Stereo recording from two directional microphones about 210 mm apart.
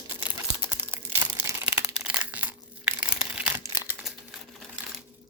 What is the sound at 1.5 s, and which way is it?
Crumpling, 10° right (ahead or behind).